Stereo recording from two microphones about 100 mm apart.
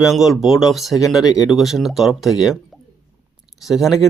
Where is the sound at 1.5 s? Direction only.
Centre (ahead or behind).